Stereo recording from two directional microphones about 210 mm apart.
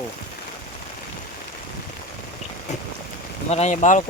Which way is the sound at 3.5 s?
30° left (ahead or behind).